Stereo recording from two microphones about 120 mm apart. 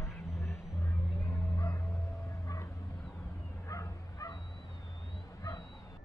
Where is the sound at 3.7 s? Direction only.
25° left (ahead or behind).